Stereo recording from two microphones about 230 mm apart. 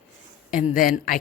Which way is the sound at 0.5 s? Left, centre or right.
Left.